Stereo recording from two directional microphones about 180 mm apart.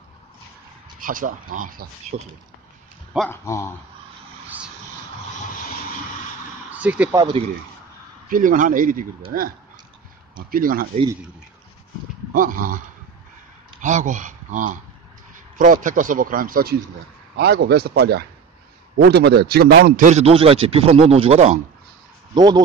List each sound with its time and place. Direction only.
0.9 s speech: 50° right (ahead or behind)
2.1 s speech: 35° right (ahead or behind)
3.3 s speech: 15° left (ahead or behind)
6.7 s speech: 10° right (ahead or behind)
7.2 s speech: 25° right (ahead or behind)
8.3 s speech: 50° right (ahead or behind)
10.5 s speech: 55° right (ahead or behind)
12.4 s speech: 50° right (ahead or behind)
17.4 s a man's voice: 65° right (ahead or behind)
20.0 s speech: 40° right (ahead or behind)
22.3 s speech: 25° right (ahead or behind)